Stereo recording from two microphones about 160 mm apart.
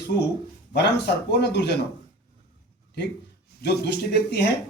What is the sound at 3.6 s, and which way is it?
Speech, 90° left.